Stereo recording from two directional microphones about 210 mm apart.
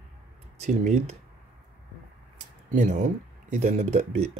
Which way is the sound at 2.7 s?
35° right (ahead or behind).